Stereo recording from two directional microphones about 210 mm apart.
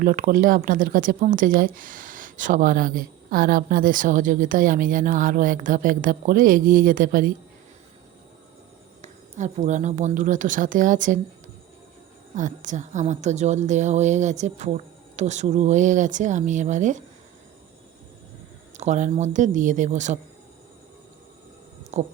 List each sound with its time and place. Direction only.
0.0 s speech: 40° right (ahead or behind)
9.0 s speech: 35° right (ahead or behind)
12.4 s speech: 35° right (ahead or behind)
18.8 s speech: 35° right (ahead or behind)
21.9 s speech: 35° right (ahead or behind)